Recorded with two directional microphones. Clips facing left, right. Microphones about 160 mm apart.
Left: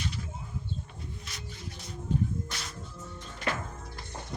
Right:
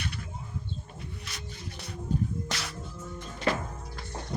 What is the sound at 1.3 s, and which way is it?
Music, 70° right (ahead or behind).